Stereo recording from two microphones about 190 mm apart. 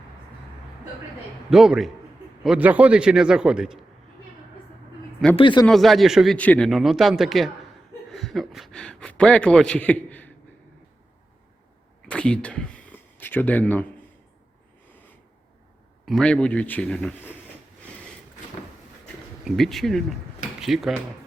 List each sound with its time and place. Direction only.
1.5 s a man's voice: centre (ahead or behind)
5.4 s a man's voice: 25° left (ahead or behind)
5.6 s a man's voice: centre (ahead or behind)
12.0 s speech: 5° left (ahead or behind)
16.0 s a man's voice: 5° left (ahead or behind)
19.5 s a man's voice: centre (ahead or behind)